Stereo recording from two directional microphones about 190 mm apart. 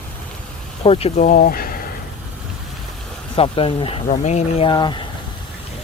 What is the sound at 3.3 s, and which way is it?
Speech, 30° left (ahead or behind).